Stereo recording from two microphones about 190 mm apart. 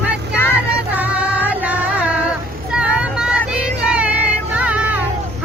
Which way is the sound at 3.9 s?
5° right (ahead or behind).